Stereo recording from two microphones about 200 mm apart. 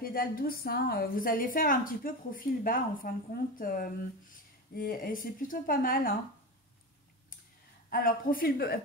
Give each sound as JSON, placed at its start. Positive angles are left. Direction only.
{"t": 0.0, "sound": "a woman's voice", "side_deg": 45}
{"t": 7.9, "sound": "a woman's voice", "side_deg": 45}